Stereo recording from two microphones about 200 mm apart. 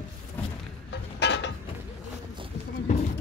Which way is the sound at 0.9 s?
60° left (ahead or behind).